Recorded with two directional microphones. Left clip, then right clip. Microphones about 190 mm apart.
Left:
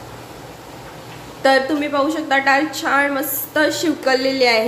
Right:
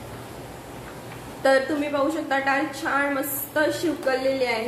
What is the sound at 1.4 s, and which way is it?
A woman's voice, 20° left (ahead or behind).